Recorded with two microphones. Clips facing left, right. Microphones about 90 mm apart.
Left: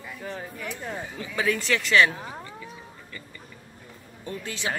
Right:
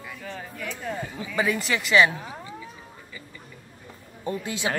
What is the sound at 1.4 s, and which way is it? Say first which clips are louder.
A woman's voice: even; 10° right (ahead or behind).